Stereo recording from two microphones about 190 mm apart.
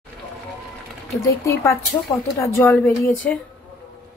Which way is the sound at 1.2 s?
15° left (ahead or behind).